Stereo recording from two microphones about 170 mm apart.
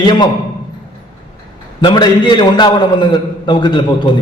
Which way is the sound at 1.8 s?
25° left (ahead or behind).